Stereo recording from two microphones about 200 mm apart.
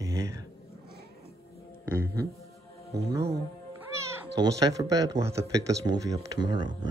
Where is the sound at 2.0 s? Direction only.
15° right (ahead or behind).